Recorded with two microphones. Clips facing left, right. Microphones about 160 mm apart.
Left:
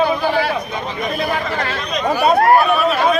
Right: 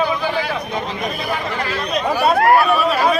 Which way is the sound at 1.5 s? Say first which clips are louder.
Left 1 dB; 40° left (ahead or behind).